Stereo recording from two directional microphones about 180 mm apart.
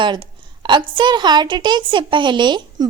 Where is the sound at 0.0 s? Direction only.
25° right (ahead or behind).